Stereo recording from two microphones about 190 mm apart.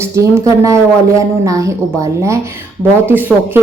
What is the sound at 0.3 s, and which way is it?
Speech, 15° right (ahead or behind).